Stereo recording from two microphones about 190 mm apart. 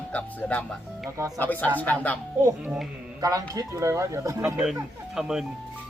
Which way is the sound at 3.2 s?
20° right (ahead or behind).